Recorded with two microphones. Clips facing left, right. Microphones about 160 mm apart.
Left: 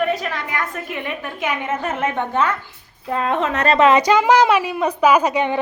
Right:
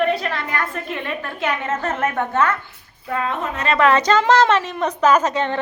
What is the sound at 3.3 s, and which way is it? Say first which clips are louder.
Speech: left 5 dB; 80° left.